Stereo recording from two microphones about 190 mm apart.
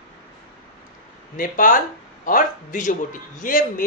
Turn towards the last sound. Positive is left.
turn(degrees=45)  # may be behind; listen again after turning